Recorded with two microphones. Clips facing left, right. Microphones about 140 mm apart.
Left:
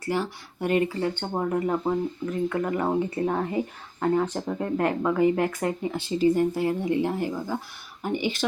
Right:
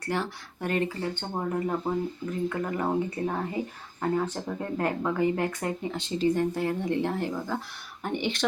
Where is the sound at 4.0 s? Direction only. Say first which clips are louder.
Left 4 dB; centre (ahead or behind).